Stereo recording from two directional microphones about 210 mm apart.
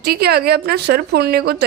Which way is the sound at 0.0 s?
50° right (ahead or behind).